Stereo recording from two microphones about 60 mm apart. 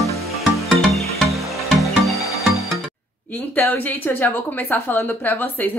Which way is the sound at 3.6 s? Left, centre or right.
Left.